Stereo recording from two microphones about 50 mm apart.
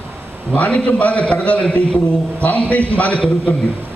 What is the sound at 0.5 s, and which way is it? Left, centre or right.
A man's voice, left.